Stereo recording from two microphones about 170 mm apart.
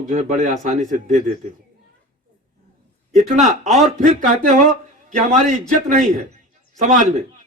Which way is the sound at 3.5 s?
40° right (ahead or behind).